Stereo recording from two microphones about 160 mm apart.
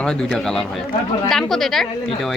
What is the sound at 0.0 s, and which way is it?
A woman's voice, 5° left (ahead or behind).